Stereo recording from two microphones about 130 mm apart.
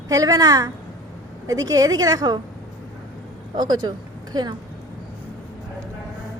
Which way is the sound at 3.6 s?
30° right (ahead or behind).